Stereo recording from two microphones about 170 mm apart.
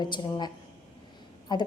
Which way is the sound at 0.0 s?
25° left (ahead or behind).